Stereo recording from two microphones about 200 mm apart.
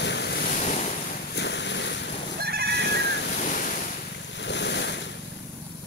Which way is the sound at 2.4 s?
55° right (ahead or behind).